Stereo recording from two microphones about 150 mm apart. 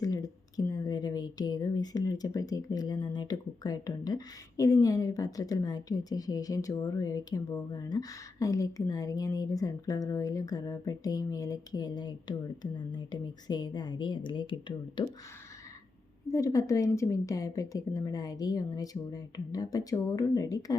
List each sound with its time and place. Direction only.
0.0 s a woman's voice: 25° left (ahead or behind)
16.3 s a woman's voice: 20° left (ahead or behind)